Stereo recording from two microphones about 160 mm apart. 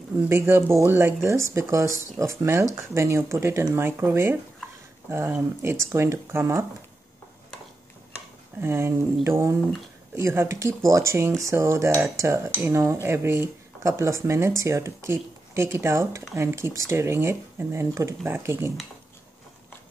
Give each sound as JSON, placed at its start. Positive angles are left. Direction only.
{"t": 0.3, "sound": "cutlery", "side_deg": -15}
{"t": 8.5, "sound": "cutlery", "side_deg": -15}